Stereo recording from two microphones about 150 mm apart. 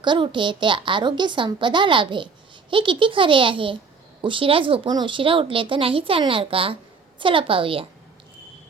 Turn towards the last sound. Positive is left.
turn(degrees=-35)  # may be behind; listen again after turning